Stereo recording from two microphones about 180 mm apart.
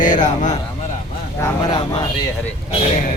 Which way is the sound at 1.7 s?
25° left (ahead or behind).